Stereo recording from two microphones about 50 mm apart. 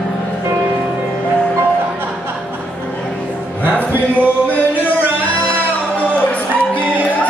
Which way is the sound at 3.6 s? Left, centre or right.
Right.